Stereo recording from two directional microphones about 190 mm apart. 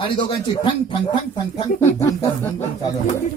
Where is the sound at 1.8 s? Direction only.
15° left (ahead or behind).